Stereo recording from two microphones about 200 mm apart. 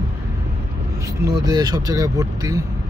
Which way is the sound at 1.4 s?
20° right (ahead or behind).